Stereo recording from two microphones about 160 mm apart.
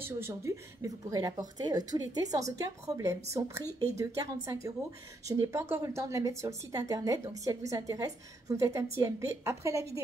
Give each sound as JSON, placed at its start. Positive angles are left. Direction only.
{"t": 0.0, "sound": "a woman's voice", "side_deg": -15}